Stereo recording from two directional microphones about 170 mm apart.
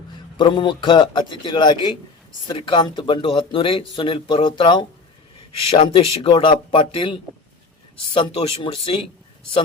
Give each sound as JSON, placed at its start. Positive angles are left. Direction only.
{"t": 0.3, "sound": "a man's voice", "side_deg": 30}